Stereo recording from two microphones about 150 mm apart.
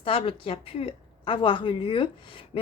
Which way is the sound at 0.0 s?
40° left (ahead or behind).